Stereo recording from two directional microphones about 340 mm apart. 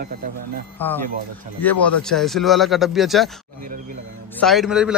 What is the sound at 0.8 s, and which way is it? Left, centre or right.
A man's voice, centre.